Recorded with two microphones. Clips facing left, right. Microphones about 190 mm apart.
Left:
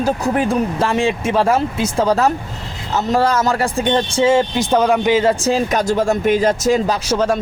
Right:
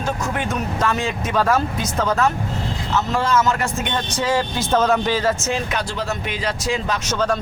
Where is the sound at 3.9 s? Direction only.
25° left (ahead or behind).